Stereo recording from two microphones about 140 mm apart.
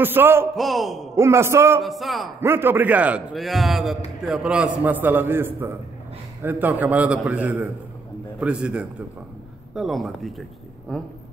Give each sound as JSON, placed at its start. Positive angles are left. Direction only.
{"t": 0.0, "sound": "a man's voice", "side_deg": -15}
{"t": 0.6, "sound": "speech", "side_deg": 0}
{"t": 1.1, "sound": "a man's voice", "side_deg": -20}
{"t": 1.8, "sound": "speech", "side_deg": 0}
{"t": 2.4, "sound": "a man's voice", "side_deg": -15}